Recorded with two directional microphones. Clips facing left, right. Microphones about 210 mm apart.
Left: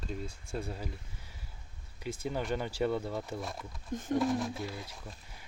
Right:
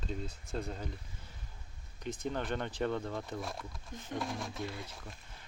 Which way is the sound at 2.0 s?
10° left (ahead or behind).